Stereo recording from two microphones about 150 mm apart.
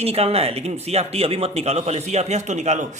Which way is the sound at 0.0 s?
40° right (ahead or behind).